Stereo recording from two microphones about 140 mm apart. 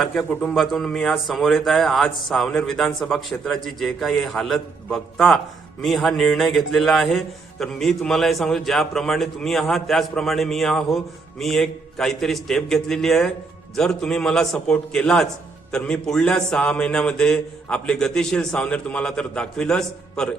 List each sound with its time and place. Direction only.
0.2 s a man's voice: centre (ahead or behind)